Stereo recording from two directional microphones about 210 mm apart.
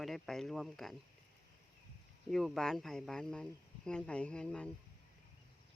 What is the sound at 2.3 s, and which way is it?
Speech, centre (ahead or behind).